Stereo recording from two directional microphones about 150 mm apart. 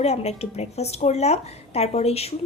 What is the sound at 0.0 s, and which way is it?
Speech, 45° left (ahead or behind).